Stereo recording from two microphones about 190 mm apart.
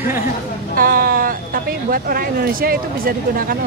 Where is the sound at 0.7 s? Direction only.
50° right (ahead or behind).